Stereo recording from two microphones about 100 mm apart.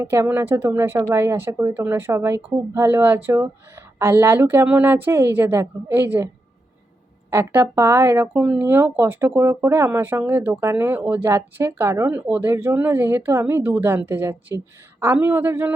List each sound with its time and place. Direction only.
0.0 s speech: 25° right (ahead or behind)
7.3 s speech: 25° right (ahead or behind)
12.0 s speech: 20° right (ahead or behind)